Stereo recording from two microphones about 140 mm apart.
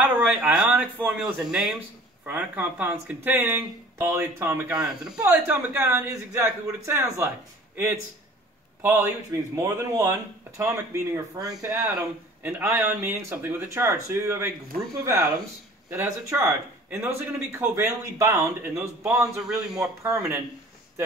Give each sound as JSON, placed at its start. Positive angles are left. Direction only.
{"t": 0.2, "sound": "speech", "side_deg": -10}
{"t": 4.7, "sound": "speech", "side_deg": -5}
{"t": 5.2, "sound": "a man's voice", "side_deg": -15}
{"t": 19.4, "sound": "speech", "side_deg": -5}
{"t": 20.0, "sound": "speech", "side_deg": -20}